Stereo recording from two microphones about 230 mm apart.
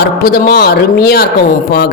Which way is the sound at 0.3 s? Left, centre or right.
Left.